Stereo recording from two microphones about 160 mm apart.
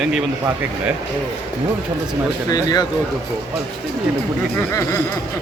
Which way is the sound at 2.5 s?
25° left (ahead or behind).